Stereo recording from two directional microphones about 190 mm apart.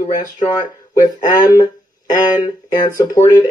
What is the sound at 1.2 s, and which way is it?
Speech, 20° left (ahead or behind).